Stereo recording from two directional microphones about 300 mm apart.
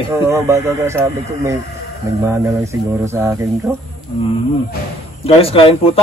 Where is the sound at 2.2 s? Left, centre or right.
Centre.